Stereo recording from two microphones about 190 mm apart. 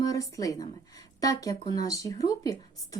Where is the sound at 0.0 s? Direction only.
20° left (ahead or behind).